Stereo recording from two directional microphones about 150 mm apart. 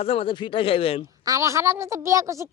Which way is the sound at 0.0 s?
40° left (ahead or behind).